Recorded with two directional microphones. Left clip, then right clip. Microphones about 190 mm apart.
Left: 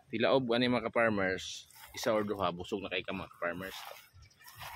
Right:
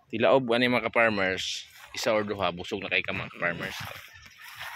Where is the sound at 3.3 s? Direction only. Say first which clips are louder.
Right 7 dB; 25° right (ahead or behind).